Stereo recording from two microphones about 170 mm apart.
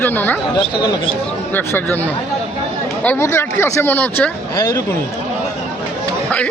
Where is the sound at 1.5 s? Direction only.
10° left (ahead or behind).